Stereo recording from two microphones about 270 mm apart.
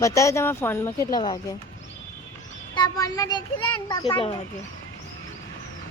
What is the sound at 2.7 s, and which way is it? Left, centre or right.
Speech, centre.